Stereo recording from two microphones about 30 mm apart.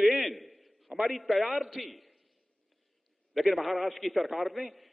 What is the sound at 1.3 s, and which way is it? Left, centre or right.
Speech, centre.